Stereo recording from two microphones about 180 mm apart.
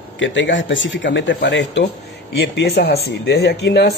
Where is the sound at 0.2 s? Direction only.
90° left.